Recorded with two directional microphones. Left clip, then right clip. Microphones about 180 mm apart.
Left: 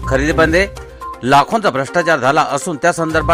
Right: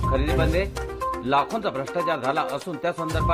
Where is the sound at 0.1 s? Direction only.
40° left (ahead or behind).